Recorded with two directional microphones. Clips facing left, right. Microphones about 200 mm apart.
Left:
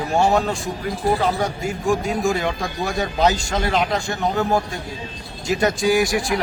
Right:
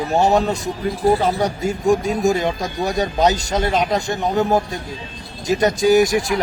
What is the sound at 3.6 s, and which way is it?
A man's voice, 20° right (ahead or behind).